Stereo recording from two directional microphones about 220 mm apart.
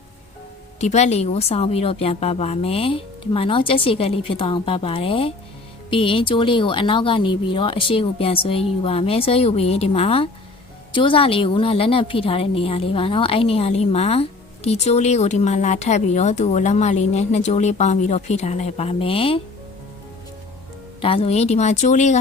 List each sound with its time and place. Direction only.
0.8 s a woman's voice: 30° left (ahead or behind)
21.0 s speech: 25° left (ahead or behind)